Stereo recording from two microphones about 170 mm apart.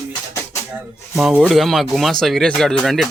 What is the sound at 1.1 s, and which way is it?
Speech, centre (ahead or behind).